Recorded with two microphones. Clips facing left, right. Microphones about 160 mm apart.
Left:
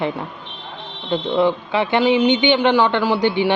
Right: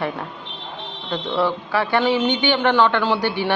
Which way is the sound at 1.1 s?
20° left (ahead or behind).